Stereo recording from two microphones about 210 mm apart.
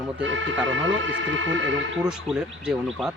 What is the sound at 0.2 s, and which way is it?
Speech, 65° right (ahead or behind).